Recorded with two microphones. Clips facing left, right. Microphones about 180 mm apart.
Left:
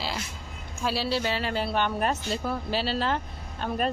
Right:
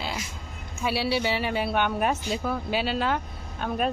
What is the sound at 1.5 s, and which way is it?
Speech, 5° right (ahead or behind).